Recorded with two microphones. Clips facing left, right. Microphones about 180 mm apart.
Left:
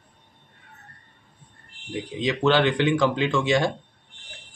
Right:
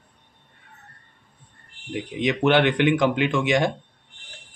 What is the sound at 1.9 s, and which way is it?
Speech, 20° right (ahead or behind).